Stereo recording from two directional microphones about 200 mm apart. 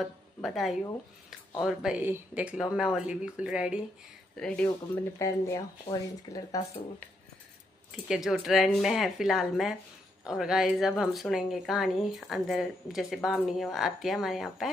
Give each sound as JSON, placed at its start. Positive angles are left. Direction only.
{"t": 0.4, "sound": "speech", "side_deg": 0}
{"t": 5.2, "sound": "speech", "side_deg": 15}
{"t": 8.1, "sound": "speech", "side_deg": 0}